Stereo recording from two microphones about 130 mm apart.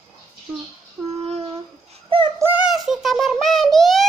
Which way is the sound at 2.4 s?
15° right (ahead or behind).